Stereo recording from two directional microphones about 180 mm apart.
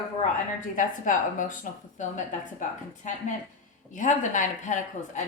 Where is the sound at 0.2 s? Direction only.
45° left (ahead or behind).